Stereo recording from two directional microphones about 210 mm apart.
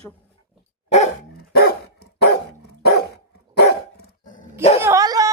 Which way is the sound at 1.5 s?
50° left (ahead or behind).